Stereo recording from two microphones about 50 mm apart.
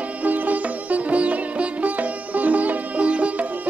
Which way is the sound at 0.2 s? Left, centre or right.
Right.